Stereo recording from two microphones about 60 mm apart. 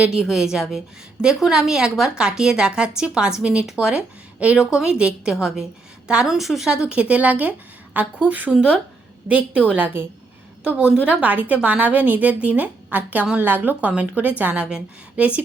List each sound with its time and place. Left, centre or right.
0.0 s a woman's voice: centre